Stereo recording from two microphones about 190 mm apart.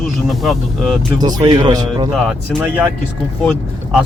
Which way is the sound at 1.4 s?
20° right (ahead or behind).